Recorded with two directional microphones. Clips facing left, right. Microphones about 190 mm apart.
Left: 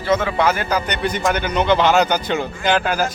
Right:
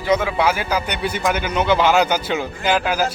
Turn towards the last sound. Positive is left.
turn(degrees=-5)  # may be behind; listen again after turning